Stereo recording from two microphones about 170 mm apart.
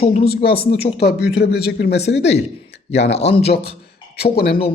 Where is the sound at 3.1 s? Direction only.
35° left (ahead or behind).